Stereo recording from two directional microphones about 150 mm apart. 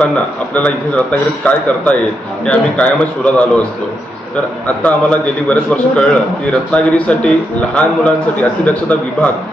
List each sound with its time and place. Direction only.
0.6 s a man's voice: 10° left (ahead or behind)
4.8 s a man's voice: 5° left (ahead or behind)